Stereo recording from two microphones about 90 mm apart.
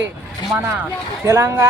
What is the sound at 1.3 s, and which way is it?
Speech, 30° right (ahead or behind).